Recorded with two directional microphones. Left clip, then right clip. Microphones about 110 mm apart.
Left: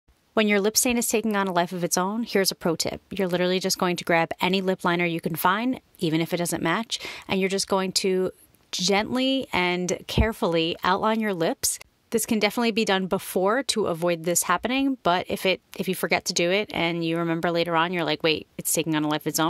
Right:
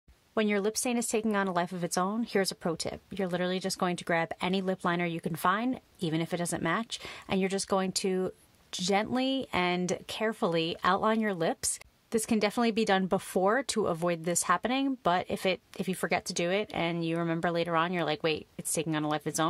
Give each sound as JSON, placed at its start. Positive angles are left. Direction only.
{"t": 0.3, "sound": "speech", "side_deg": 35}